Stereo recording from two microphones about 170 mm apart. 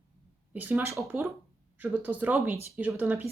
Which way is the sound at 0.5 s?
10° right (ahead or behind).